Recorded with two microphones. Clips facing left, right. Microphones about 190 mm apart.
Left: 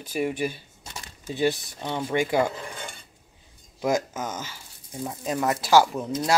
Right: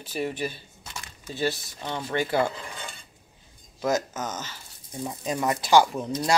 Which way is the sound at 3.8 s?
10° left (ahead or behind).